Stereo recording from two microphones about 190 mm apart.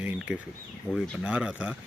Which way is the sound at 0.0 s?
5° right (ahead or behind).